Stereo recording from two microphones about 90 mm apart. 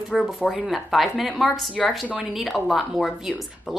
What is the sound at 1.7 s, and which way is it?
Speech, 15° left (ahead or behind).